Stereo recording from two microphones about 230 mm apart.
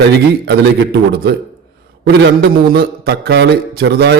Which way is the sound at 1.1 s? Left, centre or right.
Right.